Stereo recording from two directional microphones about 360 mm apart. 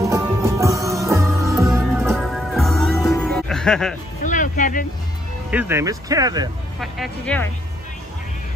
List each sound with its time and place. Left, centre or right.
0.0 s music: centre
4.2 s a sound: left
5.5 s speech: centre
6.8 s speech: centre